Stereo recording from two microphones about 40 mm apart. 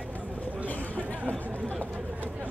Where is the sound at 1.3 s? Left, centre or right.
Left.